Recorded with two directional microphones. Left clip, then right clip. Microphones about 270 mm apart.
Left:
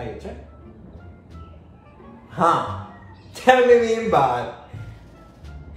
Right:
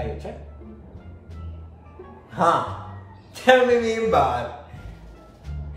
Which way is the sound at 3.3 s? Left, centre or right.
Centre.